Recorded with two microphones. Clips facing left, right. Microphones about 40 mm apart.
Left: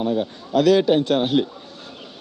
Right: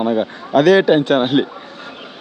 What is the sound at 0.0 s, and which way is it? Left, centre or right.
Speech, right.